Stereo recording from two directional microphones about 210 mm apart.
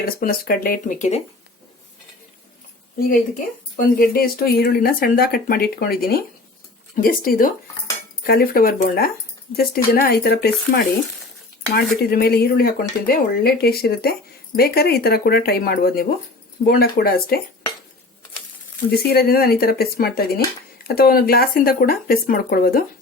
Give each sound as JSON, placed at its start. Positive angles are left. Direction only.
{"t": 0.0, "sound": "speech", "side_deg": 45}
{"t": 3.1, "sound": "speech", "side_deg": 40}
{"t": 18.9, "sound": "speech", "side_deg": 50}